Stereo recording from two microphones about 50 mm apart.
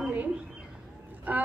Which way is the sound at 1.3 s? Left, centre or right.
Right.